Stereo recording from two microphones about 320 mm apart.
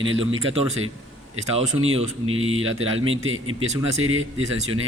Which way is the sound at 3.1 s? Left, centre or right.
Right.